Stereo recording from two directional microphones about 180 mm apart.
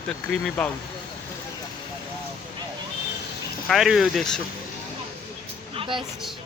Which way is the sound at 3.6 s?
Centre (ahead or behind).